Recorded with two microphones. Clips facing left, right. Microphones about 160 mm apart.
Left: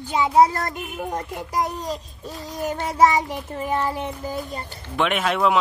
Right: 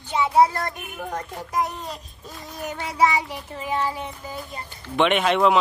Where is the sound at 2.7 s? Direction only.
45° left (ahead or behind).